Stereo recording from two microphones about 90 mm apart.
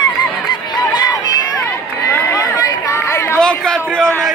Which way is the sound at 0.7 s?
45° left (ahead or behind).